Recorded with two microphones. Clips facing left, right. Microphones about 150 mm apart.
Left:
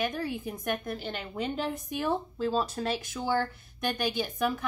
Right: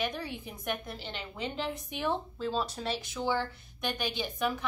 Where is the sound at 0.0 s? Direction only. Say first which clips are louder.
Left 4 dB; 50° left (ahead or behind).